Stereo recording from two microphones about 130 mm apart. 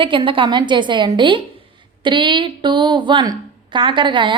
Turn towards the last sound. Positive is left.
turn(degrees=-40)  # may be behind; listen again after turning